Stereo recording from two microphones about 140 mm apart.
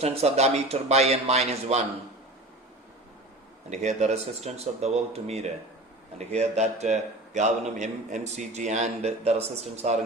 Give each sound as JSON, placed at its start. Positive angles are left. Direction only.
{"t": 0.0, "sound": "a man's voice", "side_deg": -50}
{"t": 3.7, "sound": "a man's voice", "side_deg": -55}